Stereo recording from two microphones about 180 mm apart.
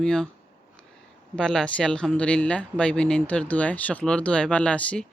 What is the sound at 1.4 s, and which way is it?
Speech, 5° left (ahead or behind).